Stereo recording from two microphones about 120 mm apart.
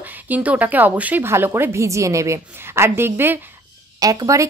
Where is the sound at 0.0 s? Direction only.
10° right (ahead or behind).